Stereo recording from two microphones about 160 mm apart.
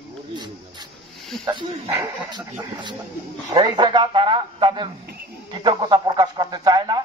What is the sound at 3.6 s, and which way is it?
A man's voice, 25° right (ahead or behind).